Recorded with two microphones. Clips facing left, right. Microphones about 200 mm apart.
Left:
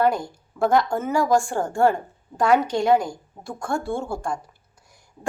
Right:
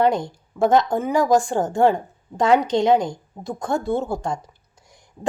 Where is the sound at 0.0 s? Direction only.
20° right (ahead or behind).